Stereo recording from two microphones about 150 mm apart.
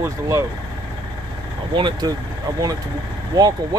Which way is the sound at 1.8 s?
30° right (ahead or behind).